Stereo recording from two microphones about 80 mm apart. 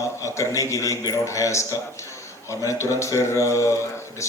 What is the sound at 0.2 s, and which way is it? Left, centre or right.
A man's voice, left.